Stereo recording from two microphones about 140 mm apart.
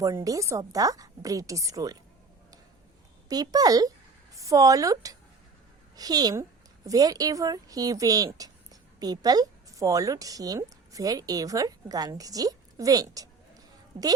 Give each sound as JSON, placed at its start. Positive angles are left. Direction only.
{"t": 0.0, "sound": "a woman's voice", "side_deg": -25}
{"t": 3.2, "sound": "a woman's voice", "side_deg": -25}